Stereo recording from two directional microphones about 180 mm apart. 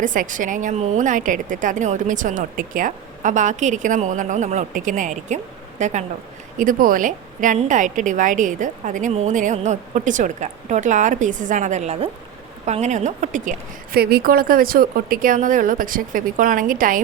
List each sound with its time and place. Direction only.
0.0 s a woman's voice: 45° right (ahead or behind)